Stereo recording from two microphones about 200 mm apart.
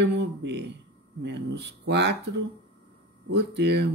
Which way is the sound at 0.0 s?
60° right (ahead or behind).